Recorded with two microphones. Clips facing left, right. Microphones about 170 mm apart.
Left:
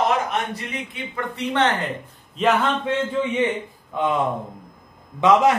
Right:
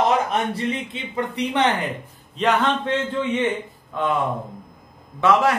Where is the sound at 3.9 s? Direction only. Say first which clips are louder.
Left 1 dB; 15° left (ahead or behind).